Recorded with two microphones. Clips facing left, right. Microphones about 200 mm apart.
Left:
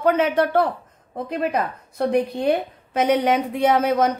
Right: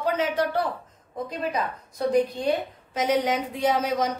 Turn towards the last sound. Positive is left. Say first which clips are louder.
# left 5 dB
turn(degrees=60)  # may be behind; listen again after turning